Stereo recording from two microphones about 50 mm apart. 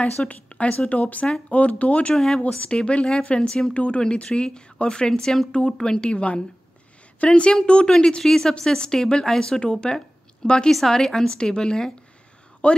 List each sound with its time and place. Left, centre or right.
0.0 s speech: left
2.1 s a woman's voice: centre
12.6 s speech: left